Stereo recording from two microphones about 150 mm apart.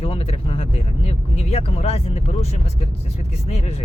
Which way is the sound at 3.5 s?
45° left (ahead or behind).